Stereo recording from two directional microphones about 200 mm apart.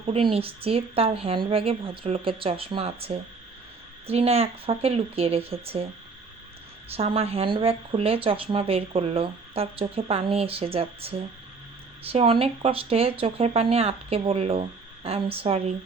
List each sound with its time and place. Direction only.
0.0 s speech: 25° right (ahead or behind)
6.9 s speech: 30° right (ahead or behind)